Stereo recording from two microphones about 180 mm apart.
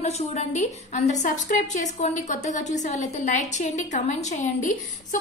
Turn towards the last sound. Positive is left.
turn(degrees=45)  # may be behind; listen again after turning